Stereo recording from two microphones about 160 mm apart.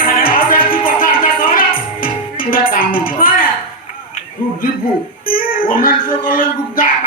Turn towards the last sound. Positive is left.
turn(degrees=65)  # may be behind; listen again after turning